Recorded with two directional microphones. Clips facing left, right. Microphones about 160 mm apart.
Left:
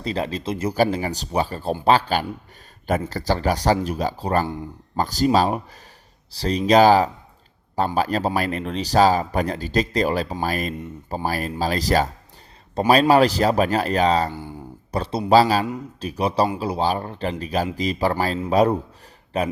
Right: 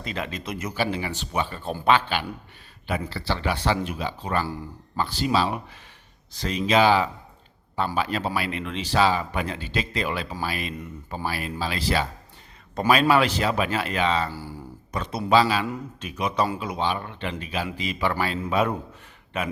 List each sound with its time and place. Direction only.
0.0 s speech: 35° left (ahead or behind)